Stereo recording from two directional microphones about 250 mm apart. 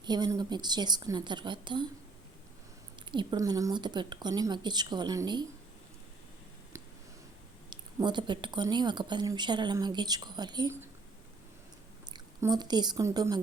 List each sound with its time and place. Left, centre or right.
0.0 s speech: centre
3.1 s speech: centre
7.7 s speech: centre
12.1 s a woman's voice: centre